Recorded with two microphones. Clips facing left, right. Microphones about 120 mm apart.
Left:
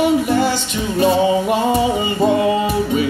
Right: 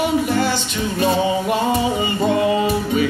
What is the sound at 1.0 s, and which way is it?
Music, 20° left (ahead or behind).